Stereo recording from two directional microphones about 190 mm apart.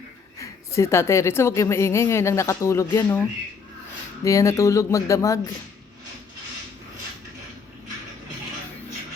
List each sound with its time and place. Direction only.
0.3 s a woman's voice: 15° left (ahead or behind)